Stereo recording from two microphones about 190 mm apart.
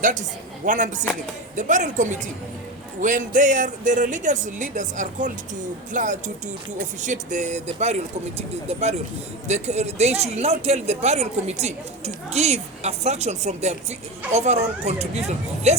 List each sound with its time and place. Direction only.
0.0 s speech: 40° right (ahead or behind)